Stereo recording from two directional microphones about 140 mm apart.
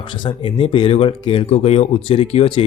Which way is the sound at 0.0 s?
35° left (ahead or behind).